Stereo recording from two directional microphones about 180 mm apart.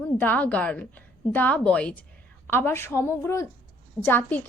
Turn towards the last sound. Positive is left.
turn(degrees=10)  # may be behind; listen again after turning